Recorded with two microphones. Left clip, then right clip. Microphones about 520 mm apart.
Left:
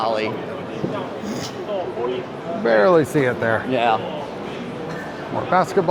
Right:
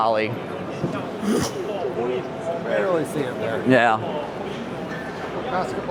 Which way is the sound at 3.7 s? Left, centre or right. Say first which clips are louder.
Right 3 dB; right.